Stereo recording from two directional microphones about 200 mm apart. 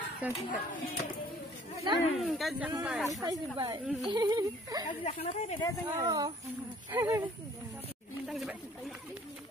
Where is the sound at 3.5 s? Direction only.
20° right (ahead or behind).